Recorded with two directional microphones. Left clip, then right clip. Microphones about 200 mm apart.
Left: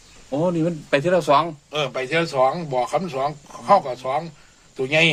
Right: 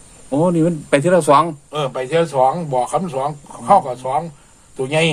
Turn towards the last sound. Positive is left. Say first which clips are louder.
# right 1 dB
turn(degrees=15)  # may be behind; listen again after turning